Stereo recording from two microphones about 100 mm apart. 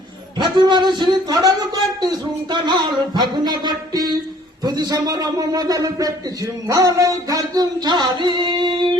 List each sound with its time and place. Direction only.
0.3 s a man's voice: 50° right (ahead or behind)